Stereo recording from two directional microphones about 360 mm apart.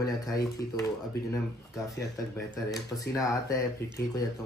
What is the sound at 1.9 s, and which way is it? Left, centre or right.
A man's voice, centre.